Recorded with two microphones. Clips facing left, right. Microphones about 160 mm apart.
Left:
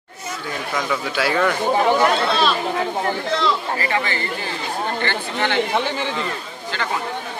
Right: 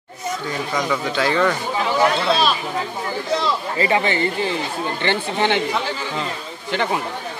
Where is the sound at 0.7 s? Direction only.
5° left (ahead or behind).